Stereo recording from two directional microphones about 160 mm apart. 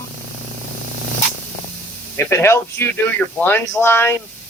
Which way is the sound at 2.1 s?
15° left (ahead or behind).